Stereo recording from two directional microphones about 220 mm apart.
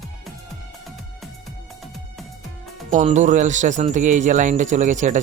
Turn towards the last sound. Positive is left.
turn(degrees=-35)  # may be behind; listen again after turning